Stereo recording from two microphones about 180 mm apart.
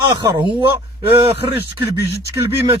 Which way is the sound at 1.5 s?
15° right (ahead or behind).